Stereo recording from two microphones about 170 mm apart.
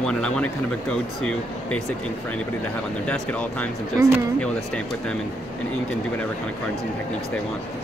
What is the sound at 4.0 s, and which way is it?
Speech, 15° right (ahead or behind).